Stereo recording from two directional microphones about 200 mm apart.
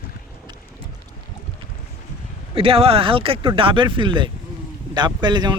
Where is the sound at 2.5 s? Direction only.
25° right (ahead or behind).